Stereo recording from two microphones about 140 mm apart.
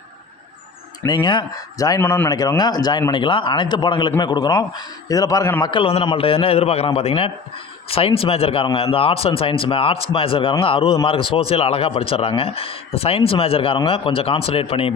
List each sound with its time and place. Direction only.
1.0 s a man's voice: 30° left (ahead or behind)
2.0 s a man's voice: 15° left (ahead or behind)
2.3 s a man's voice: 25° left (ahead or behind)
5.6 s a man's voice: 40° left (ahead or behind)